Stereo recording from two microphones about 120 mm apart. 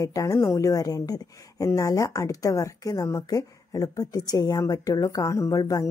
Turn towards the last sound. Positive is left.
turn(degrees=30)  # may be behind; listen again after turning